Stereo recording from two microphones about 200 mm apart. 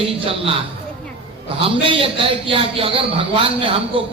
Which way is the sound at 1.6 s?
25° right (ahead or behind).